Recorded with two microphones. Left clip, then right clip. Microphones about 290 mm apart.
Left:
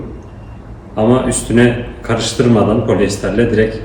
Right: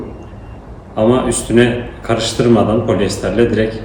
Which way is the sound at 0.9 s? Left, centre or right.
Centre.